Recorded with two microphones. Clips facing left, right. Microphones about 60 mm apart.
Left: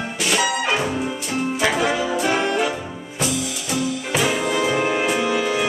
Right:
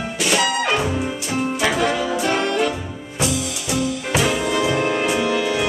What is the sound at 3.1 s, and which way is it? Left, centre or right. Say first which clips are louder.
Music: right 1 dB; centre.